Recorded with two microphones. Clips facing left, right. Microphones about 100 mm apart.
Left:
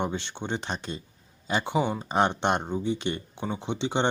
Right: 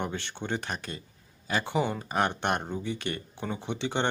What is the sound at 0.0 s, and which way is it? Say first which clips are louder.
Speech: left 3 dB; 20° left (ahead or behind).